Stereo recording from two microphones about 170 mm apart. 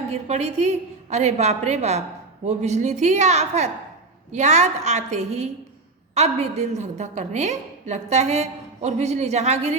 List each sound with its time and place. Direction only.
0.1 s a woman's voice: 40° right (ahead or behind)